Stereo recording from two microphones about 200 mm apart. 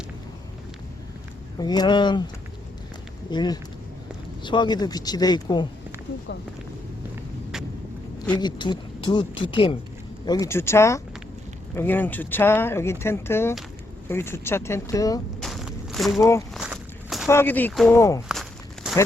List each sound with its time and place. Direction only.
1.5 s speech: 20° left (ahead or behind)
8.4 s speech: 20° left (ahead or behind)
15.4 s walk: centre (ahead or behind)
17.2 s speech: 10° left (ahead or behind)
18.3 s walk: centre (ahead or behind)